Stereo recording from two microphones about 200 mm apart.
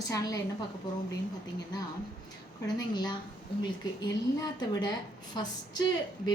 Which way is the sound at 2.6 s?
20° left (ahead or behind).